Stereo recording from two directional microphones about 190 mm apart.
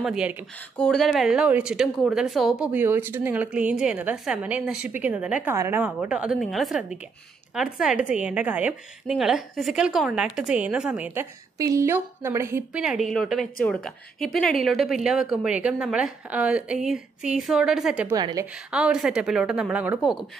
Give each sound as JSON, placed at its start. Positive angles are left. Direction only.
{"t": 0.0, "sound": "speech", "side_deg": -5}
{"t": 0.7, "sound": "speech", "side_deg": 5}
{"t": 11.5, "sound": "speech", "side_deg": -15}
{"t": 18.1, "sound": "a woman's voice", "side_deg": -20}
{"t": 18.7, "sound": "speech", "side_deg": -5}